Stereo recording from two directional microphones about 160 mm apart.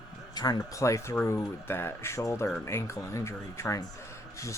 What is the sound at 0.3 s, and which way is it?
Speech, 25° left (ahead or behind).